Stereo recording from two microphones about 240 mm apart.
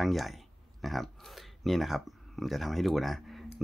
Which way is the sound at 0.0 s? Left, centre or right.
Centre.